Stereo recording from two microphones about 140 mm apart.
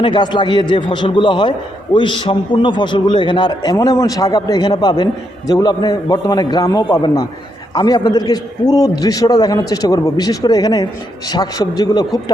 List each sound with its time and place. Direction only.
0.0 s a man's voice: 35° left (ahead or behind)